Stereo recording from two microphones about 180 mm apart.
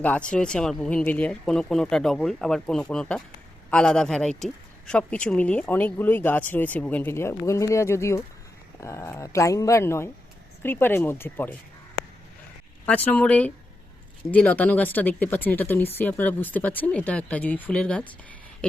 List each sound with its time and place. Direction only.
0.0 s speech: 5° left (ahead or behind)
12.8 s speech: 10° left (ahead or behind)